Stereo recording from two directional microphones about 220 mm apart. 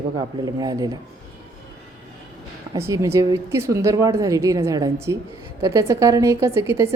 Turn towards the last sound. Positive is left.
turn(degrees=-10)  # may be behind; listen again after turning